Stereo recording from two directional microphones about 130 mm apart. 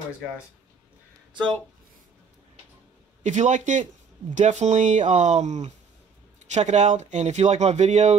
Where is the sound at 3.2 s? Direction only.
65° right (ahead or behind).